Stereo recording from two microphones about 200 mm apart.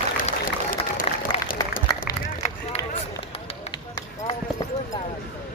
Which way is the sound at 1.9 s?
20° left (ahead or behind).